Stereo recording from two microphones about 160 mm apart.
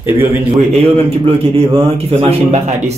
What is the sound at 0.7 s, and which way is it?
A man's voice, 40° right (ahead or behind).